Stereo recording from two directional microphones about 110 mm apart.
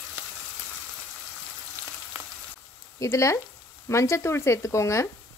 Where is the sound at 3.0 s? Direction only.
30° left (ahead or behind).